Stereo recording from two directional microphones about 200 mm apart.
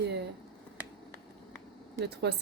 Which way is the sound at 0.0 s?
60° right (ahead or behind).